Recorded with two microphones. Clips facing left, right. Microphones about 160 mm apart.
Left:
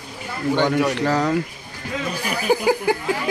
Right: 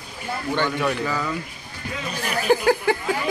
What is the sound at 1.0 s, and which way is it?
Speech, 75° left (ahead or behind).